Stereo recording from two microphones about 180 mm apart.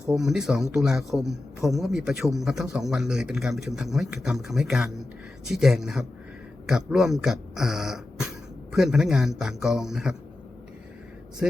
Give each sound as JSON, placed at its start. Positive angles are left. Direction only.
{"t": 0.1, "sound": "a man's voice", "side_deg": 0}